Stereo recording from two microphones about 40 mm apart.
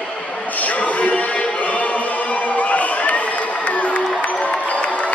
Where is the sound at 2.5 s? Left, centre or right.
Left.